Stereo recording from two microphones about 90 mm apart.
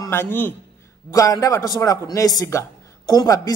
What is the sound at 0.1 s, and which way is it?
Speech, 25° left (ahead or behind).